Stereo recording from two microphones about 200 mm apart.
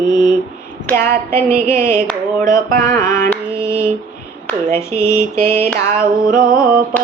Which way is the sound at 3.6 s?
5° right (ahead or behind).